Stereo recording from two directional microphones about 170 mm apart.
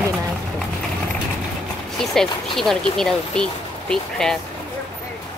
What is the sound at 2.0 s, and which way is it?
Speech, centre (ahead or behind).